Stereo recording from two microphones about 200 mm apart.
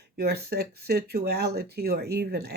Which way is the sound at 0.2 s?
50° right (ahead or behind).